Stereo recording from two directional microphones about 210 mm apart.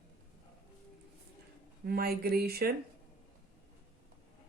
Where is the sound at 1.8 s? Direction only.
45° right (ahead or behind).